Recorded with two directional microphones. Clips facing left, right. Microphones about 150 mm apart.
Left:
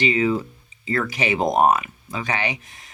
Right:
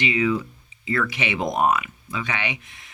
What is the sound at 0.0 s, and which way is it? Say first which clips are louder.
Speech: left 2 dB; 35° left (ahead or behind).